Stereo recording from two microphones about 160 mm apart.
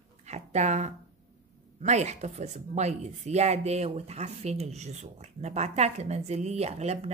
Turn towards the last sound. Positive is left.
turn(degrees=-40)  # may be behind; listen again after turning